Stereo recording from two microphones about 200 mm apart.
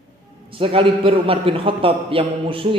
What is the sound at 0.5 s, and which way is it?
A man's voice, 25° right (ahead or behind).